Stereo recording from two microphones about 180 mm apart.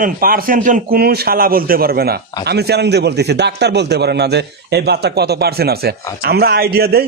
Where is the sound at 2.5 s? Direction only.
65° right (ahead or behind).